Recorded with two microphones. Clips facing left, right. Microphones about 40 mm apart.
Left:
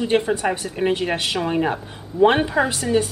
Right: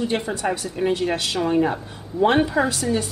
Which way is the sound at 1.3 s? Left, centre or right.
Centre.